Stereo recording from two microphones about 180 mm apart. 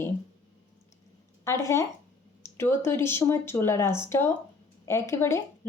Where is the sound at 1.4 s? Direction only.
15° left (ahead or behind).